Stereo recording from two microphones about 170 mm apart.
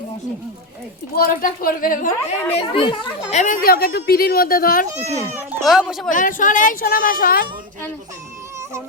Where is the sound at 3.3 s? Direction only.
50° left (ahead or behind).